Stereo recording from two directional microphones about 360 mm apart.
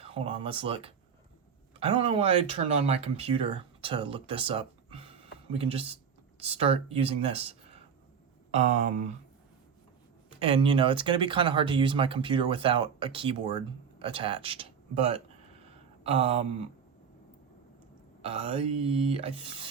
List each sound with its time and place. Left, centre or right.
0.0 s speech: centre
10.4 s speech: centre
18.2 s speech: centre